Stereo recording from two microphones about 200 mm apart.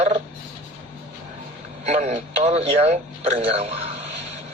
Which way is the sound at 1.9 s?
35° right (ahead or behind).